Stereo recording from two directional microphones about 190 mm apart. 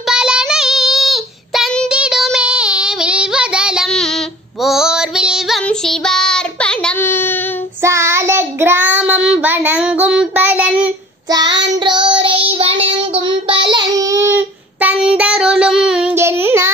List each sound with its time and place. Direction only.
0.1 s child singing: 5° right (ahead or behind); by 7.3 s 10° left (ahead or behind)
7.8 s child singing: 15° right (ahead or behind)
11.2 s child singing: 20° right (ahead or behind)